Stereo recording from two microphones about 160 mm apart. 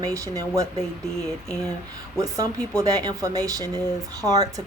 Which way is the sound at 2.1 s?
20° right (ahead or behind).